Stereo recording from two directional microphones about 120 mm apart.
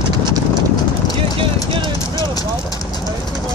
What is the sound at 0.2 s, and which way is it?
Clip-clop, 40° right (ahead or behind).